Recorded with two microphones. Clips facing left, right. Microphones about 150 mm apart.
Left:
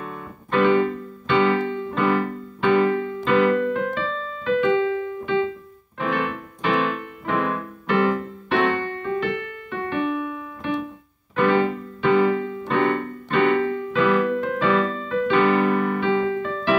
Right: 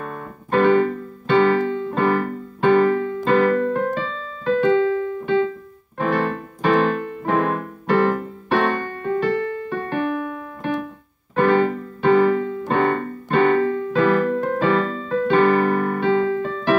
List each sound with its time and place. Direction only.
0.0 s piano: 45° right (ahead or behind)
5.9 s keyboard: 40° right (ahead or behind)
11.3 s music: 40° right (ahead or behind)